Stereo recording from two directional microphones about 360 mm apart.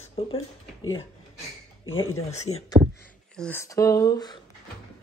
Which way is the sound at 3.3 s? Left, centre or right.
Centre.